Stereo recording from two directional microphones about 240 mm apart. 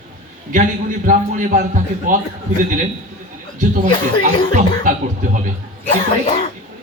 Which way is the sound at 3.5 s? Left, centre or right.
Right.